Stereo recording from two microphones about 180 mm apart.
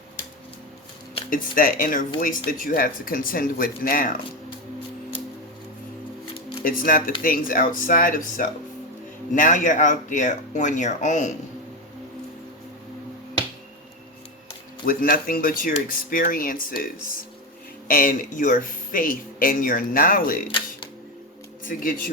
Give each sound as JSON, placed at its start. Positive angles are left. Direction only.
{"t": 1.3, "sound": "speech", "side_deg": 50}
{"t": 6.7, "sound": "speech", "side_deg": 50}
{"t": 14.8, "sound": "speech", "side_deg": 55}
{"t": 21.6, "sound": "speech", "side_deg": 50}